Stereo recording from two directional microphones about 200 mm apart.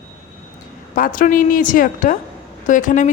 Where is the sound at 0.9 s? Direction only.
45° left (ahead or behind).